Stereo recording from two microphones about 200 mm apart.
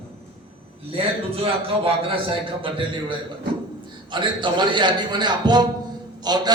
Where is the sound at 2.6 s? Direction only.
25° right (ahead or behind).